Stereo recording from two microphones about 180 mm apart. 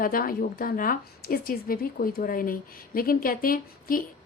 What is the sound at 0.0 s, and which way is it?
A woman's voice, 50° left (ahead or behind).